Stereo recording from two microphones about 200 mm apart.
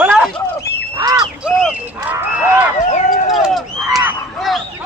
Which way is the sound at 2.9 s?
40° left (ahead or behind).